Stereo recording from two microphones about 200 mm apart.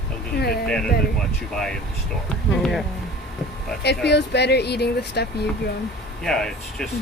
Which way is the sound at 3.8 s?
55° left (ahead or behind).